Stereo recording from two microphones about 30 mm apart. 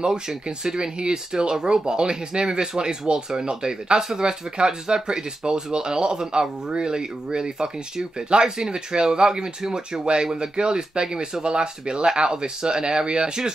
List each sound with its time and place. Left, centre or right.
0.5 s speech: right